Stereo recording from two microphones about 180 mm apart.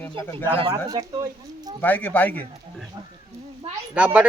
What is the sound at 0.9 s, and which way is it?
Speech, 20° right (ahead or behind).